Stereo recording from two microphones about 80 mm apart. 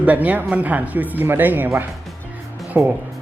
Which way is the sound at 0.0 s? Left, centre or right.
Centre.